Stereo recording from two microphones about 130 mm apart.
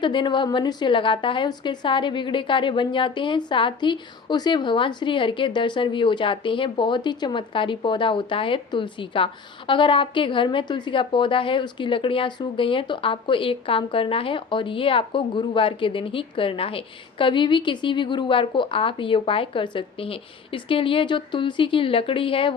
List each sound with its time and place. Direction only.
0.0 s a woman's voice: 35° left (ahead or behind)